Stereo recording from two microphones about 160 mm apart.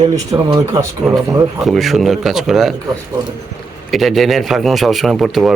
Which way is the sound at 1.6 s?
Centre (ahead or behind).